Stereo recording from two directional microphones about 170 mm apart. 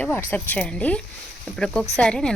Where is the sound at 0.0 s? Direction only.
10° left (ahead or behind).